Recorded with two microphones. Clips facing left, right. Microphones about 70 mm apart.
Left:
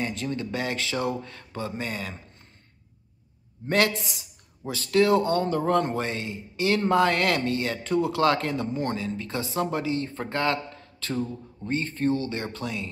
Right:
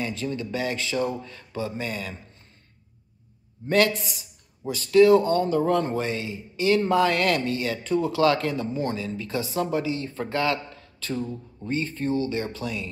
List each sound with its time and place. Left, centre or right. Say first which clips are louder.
0.1 s speech: right 1 dB; left
3.6 s speech: right 2 dB; left
4.6 s speech: right 5 dB; left
5.7 s speech: even; left
6.8 s a man's voice: even; left